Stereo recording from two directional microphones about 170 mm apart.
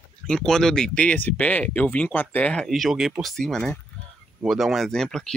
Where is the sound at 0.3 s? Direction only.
5° left (ahead or behind).